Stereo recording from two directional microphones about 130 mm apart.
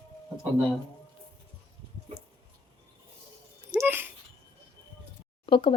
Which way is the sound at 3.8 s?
15° right (ahead or behind).